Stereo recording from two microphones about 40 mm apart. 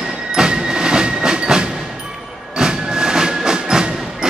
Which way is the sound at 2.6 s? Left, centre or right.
Centre.